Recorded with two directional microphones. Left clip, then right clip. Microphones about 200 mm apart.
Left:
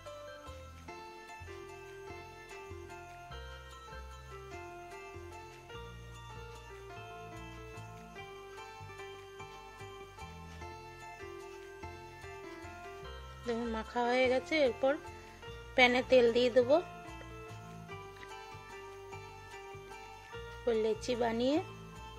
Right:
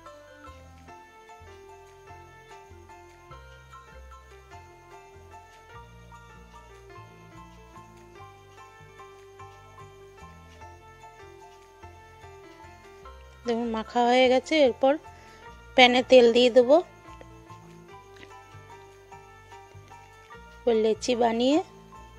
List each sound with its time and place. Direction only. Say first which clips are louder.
13.5 s speech: right 8 dB; 35° right (ahead or behind)
20.6 s speech: right 9 dB; 35° right (ahead or behind)